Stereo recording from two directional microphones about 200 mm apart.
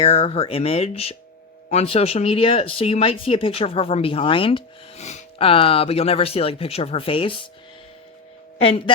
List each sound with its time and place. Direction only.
0.0 s speech: 30° left (ahead or behind)
8.5 s speech: 30° left (ahead or behind)